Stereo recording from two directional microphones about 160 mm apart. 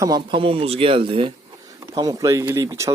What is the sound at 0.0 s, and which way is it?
Speech, 30° right (ahead or behind).